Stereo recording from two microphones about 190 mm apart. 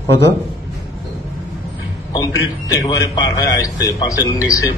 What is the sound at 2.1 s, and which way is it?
A man's voice, 20° left (ahead or behind).